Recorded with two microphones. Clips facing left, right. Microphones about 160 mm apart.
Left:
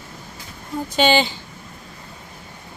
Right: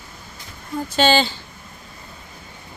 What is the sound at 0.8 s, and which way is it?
Speech, 15° left (ahead or behind).